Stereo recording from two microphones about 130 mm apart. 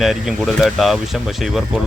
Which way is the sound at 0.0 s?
Centre (ahead or behind).